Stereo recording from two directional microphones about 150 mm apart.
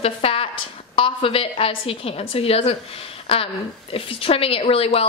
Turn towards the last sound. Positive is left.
turn(degrees=40)  # may be behind; listen again after turning